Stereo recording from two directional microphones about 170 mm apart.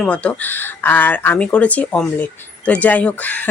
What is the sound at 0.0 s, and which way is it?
Speech, 5° left (ahead or behind).